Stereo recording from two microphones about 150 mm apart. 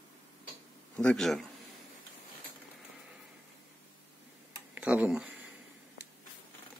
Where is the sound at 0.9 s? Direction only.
5° left (ahead or behind).